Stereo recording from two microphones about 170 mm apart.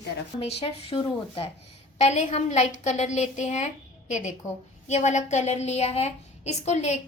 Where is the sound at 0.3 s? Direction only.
35° left (ahead or behind).